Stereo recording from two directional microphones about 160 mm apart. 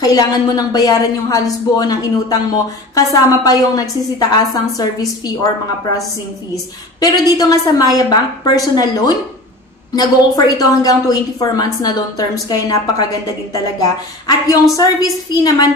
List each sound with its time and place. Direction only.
0.0 s a woman's voice: 25° left (ahead or behind)
6.5 s a woman's voice: 25° left (ahead or behind)
14.2 s a woman's voice: 25° left (ahead or behind)